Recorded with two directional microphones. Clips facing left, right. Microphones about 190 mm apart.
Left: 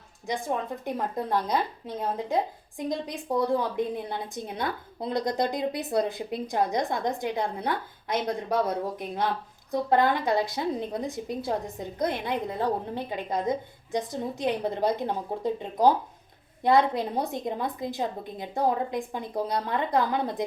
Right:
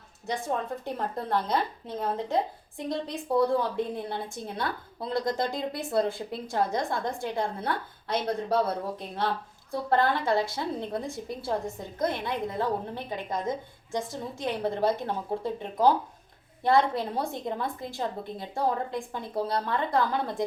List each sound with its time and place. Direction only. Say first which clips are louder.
0.9 s speech: left 4 dB; 15° left (ahead or behind)
16.6 s speech: left 2 dB; 20° left (ahead or behind)